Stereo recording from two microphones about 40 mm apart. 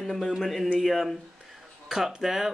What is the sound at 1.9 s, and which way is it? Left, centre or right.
Speech, centre.